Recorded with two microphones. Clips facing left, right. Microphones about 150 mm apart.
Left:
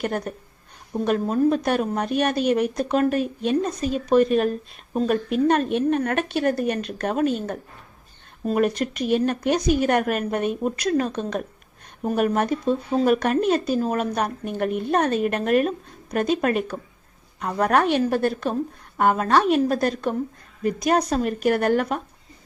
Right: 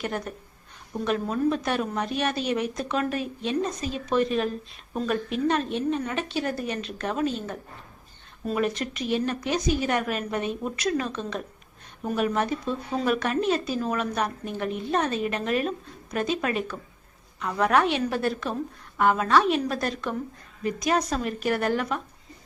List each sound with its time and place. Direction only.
0.0 s speech: 45° left (ahead or behind)